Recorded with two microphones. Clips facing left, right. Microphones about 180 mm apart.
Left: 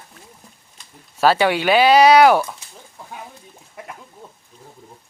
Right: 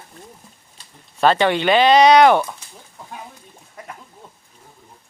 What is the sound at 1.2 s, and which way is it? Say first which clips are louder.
Speech: even; 5° left (ahead or behind).